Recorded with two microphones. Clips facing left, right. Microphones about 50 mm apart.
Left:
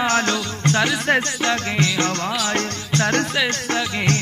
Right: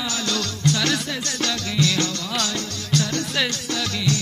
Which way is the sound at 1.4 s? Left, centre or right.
Left.